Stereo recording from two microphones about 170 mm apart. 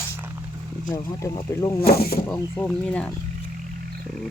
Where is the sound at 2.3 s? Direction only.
10° left (ahead or behind).